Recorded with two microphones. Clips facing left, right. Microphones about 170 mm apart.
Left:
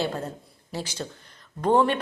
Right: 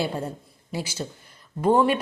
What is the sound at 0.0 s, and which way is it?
Speech, 10° right (ahead or behind).